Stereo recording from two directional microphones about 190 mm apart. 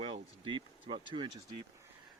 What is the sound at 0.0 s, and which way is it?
Speech, 25° right (ahead or behind).